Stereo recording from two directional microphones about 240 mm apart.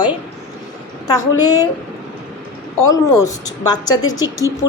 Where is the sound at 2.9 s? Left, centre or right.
Centre.